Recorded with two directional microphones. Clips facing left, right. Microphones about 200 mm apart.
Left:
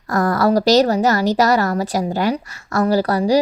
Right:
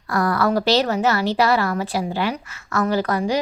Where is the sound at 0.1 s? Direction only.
40° left (ahead or behind).